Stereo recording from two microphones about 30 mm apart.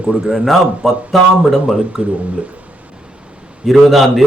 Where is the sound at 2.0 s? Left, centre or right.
Right.